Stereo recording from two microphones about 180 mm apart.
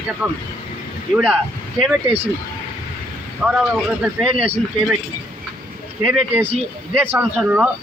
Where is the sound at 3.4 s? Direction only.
5° right (ahead or behind).